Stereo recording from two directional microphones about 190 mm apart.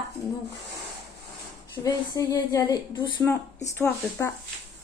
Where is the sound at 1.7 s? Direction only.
20° left (ahead or behind).